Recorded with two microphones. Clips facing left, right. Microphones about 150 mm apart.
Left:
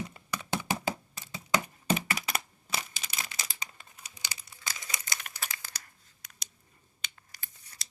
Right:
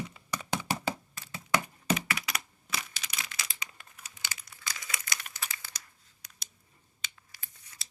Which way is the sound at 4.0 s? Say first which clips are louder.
Right 1 dB; 15° left (ahead or behind).